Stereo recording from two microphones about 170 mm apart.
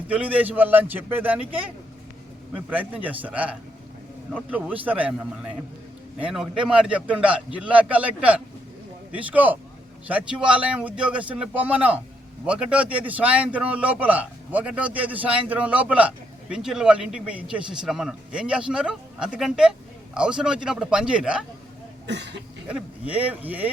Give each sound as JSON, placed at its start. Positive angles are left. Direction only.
{"t": 0.1, "sound": "a man's voice", "side_deg": -10}
{"t": 22.0, "sound": "cough", "side_deg": -90}
{"t": 22.6, "sound": "a man's voice", "side_deg": -10}